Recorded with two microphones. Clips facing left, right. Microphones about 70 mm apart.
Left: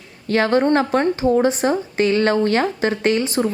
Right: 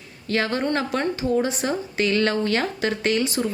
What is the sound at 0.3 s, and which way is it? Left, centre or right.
A woman's voice, left.